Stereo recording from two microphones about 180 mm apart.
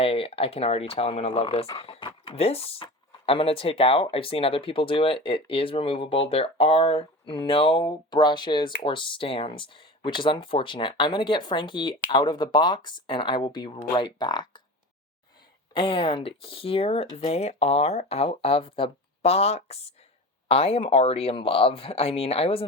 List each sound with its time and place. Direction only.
0.0 s speech: 30° left (ahead or behind)
15.7 s speech: 30° left (ahead or behind)